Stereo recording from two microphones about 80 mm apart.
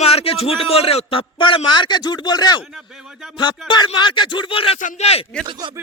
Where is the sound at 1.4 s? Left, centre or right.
Left.